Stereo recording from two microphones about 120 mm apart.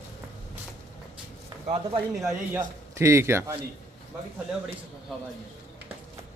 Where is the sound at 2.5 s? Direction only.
25° right (ahead or behind).